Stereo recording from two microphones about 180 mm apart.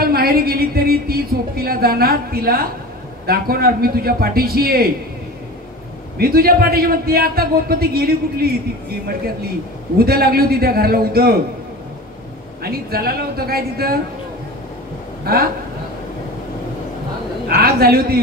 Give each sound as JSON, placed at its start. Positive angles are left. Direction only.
{"t": 0.0, "sound": "a sound", "side_deg": -55}
{"t": 3.3, "sound": "a man's voice", "side_deg": -55}
{"t": 6.1, "sound": "a man's voice", "side_deg": -55}
{"t": 9.9, "sound": "a man's voice", "side_deg": -60}
{"t": 12.6, "sound": "a man's voice", "side_deg": -60}
{"t": 15.3, "sound": "a man's voice", "side_deg": -60}
{"t": 17.5, "sound": "a man's voice", "side_deg": -55}